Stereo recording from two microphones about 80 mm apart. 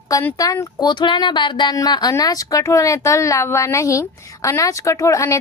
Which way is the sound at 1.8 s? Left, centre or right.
Left.